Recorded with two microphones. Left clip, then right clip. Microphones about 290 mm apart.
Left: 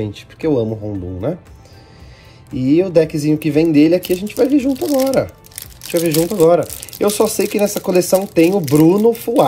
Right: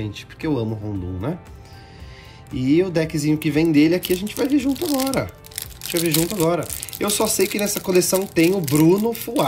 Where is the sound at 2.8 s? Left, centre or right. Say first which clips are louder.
Left 10 dB; centre.